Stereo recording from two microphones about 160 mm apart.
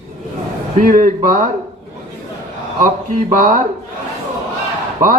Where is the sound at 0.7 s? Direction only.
55° right (ahead or behind).